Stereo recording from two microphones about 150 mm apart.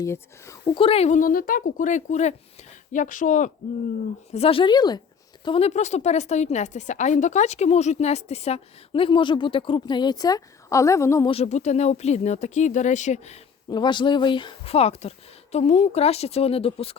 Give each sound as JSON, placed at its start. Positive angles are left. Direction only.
{"t": 0.0, "sound": "speech", "side_deg": 20}
{"t": 0.6, "sound": "speech", "side_deg": 35}
{"t": 1.2, "sound": "speech", "side_deg": 65}
{"t": 4.3, "sound": "speech", "side_deg": 40}
{"t": 5.5, "sound": "a woman's voice", "side_deg": 40}
{"t": 11.3, "sound": "a woman's voice", "side_deg": 45}
{"t": 13.7, "sound": "a woman's voice", "side_deg": 30}